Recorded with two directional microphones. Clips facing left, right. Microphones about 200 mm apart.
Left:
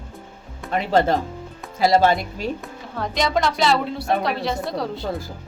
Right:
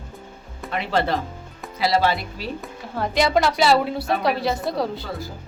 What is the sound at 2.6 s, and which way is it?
A woman's voice, 5° right (ahead or behind).